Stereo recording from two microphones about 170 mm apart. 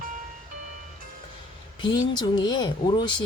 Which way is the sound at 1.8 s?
25° left (ahead or behind).